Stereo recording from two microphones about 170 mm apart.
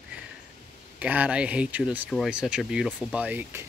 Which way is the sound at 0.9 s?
10° right (ahead or behind).